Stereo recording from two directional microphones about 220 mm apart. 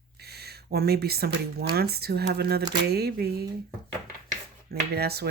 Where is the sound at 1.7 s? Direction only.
45° right (ahead or behind).